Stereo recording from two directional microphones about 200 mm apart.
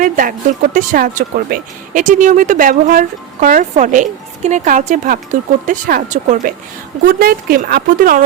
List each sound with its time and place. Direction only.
0.0 s speech: 40° right (ahead or behind)